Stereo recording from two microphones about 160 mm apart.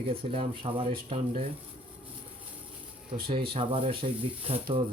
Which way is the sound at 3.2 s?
35° right (ahead or behind).